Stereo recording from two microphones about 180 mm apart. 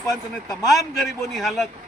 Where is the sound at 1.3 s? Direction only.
Centre (ahead or behind).